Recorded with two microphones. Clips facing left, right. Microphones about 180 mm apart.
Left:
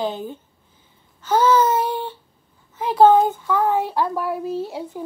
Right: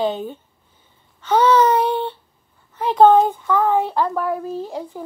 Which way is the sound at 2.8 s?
5° left (ahead or behind).